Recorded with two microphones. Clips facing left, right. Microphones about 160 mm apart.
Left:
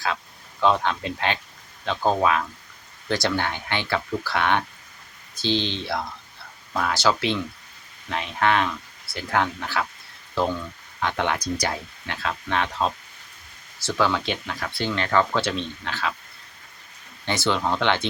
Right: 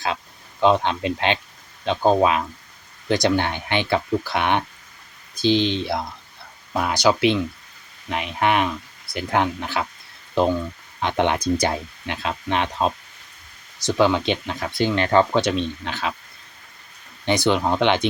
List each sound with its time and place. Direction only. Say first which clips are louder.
0.6 s speech: right 3 dB; 20° right (ahead or behind)
11.0 s speech: right 4 dB; 20° right (ahead or behind)
17.2 s speech: right 4 dB; 15° right (ahead or behind)